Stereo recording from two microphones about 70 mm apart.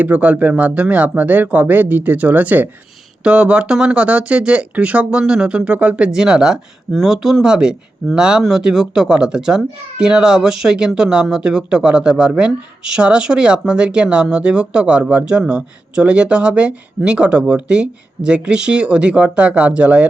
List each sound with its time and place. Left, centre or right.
0.0 s speech: right
6.1 s speech: centre